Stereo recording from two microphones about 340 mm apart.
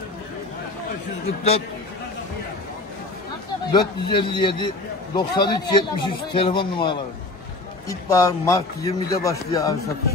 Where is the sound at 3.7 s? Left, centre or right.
Centre.